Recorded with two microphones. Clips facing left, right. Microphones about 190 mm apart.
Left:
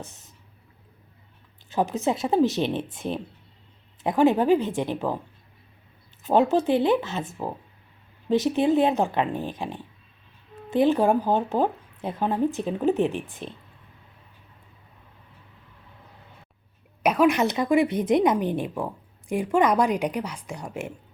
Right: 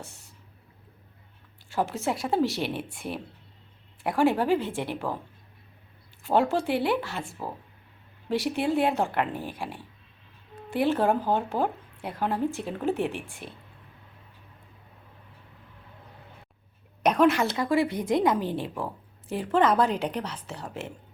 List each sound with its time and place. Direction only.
0.0 s whispering: 20° left (ahead or behind)
1.7 s a woman's voice: 20° left (ahead or behind)
6.2 s a woman's voice: 20° left (ahead or behind)
17.0 s a sound: 10° left (ahead or behind)
17.3 s a woman's voice: 20° left (ahead or behind)